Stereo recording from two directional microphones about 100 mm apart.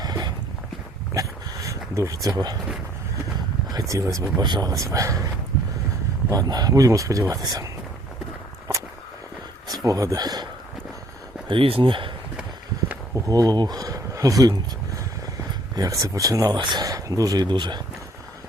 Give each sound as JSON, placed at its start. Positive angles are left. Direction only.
{"t": 0.0, "sound": "a sound", "side_deg": -40}
{"t": 2.3, "sound": "speech", "side_deg": -40}
{"t": 3.7, "sound": "speech", "side_deg": -35}
{"t": 4.4, "sound": "speech", "side_deg": -45}
{"t": 4.7, "sound": "speech", "side_deg": -35}
{"t": 6.3, "sound": "speech", "side_deg": -40}
{"t": 9.6, "sound": "speech", "side_deg": -40}
{"t": 11.4, "sound": "speech", "side_deg": -60}
{"t": 12.9, "sound": "a sound", "side_deg": -30}
{"t": 15.7, "sound": "speech", "side_deg": -35}
{"t": 16.8, "sound": "speech", "side_deg": -35}